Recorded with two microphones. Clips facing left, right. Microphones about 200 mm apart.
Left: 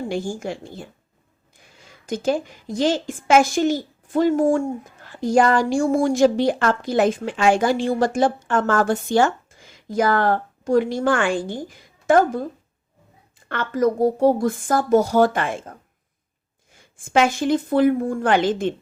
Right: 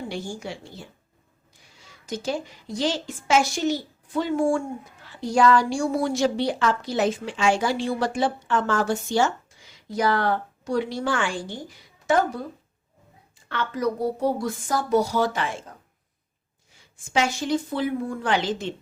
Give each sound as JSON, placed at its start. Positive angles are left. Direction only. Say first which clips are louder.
{"t": 0.1, "sound": "a woman's voice", "louder": "left 6 dB", "side_deg": 50}
{"t": 13.5, "sound": "a woman's voice", "louder": "left 5 dB", "side_deg": 50}
{"t": 16.7, "sound": "a woman's voice", "louder": "left 6 dB", "side_deg": 55}